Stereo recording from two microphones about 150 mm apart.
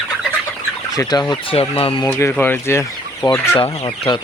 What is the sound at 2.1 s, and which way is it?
Speech, 20° left (ahead or behind).